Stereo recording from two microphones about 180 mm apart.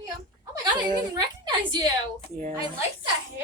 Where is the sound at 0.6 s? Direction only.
25° right (ahead or behind).